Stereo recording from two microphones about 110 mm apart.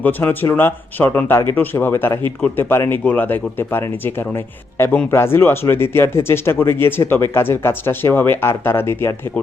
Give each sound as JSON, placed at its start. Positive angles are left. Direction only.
{"t": 0.0, "sound": "speech", "side_deg": 15}